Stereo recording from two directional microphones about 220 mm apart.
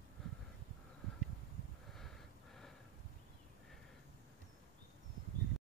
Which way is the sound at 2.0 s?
Centre (ahead or behind).